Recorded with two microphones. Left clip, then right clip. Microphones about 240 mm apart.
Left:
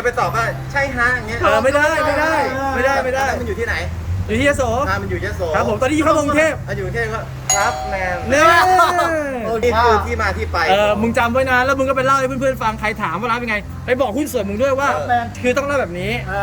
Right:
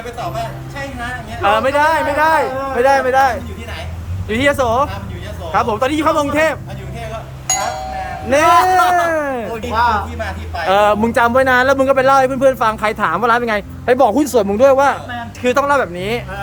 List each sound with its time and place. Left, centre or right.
0.2 s speech: centre
1.4 s speech: centre
4.3 s speech: centre
7.4 s a sound: centre
8.3 s speech: centre
10.2 s speech: centre
10.7 s speech: centre